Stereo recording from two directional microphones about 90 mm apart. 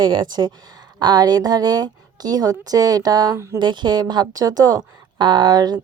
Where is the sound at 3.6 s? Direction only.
60° right (ahead or behind).